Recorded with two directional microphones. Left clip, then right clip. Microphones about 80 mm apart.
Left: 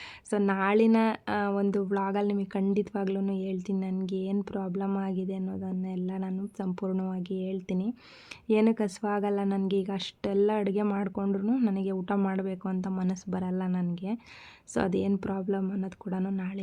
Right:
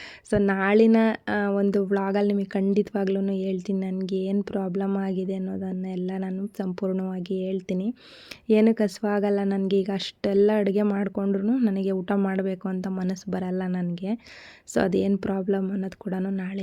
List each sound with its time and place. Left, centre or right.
0.3 s speech: right